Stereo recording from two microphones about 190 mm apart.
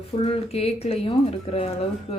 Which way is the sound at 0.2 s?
30° left (ahead or behind).